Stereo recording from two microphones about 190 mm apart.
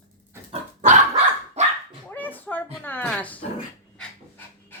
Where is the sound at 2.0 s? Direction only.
10° left (ahead or behind).